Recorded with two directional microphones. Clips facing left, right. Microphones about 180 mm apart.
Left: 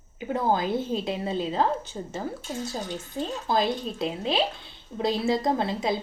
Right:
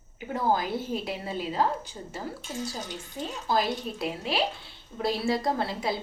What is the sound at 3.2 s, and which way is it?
Speech, 25° left (ahead or behind).